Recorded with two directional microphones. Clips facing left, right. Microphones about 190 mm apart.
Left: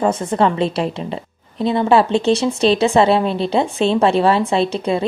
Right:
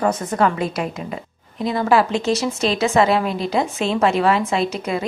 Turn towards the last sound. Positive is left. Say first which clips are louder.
# left 4 dB
turn(degrees=30)  # may be behind; listen again after turning